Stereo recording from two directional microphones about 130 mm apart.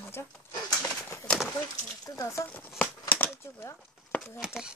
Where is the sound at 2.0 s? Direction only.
25° left (ahead or behind).